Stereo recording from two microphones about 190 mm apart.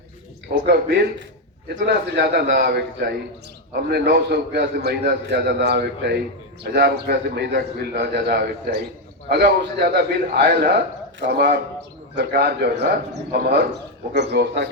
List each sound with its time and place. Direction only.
0.5 s a man's voice: 60° right (ahead or behind)